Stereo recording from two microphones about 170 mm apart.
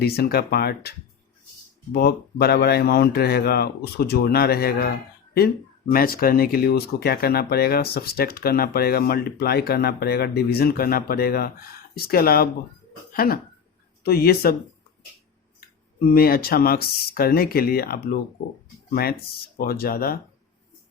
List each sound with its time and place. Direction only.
0.0 s speech: 65° left (ahead or behind)
5.9 s speech: 60° left (ahead or behind)
16.0 s speech: 60° left (ahead or behind)